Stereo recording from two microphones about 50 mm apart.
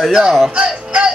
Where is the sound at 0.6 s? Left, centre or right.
Right.